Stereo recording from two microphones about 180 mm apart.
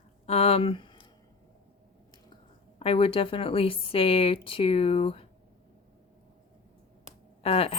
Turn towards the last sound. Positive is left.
turn(degrees=35)  # may be behind; listen again after turning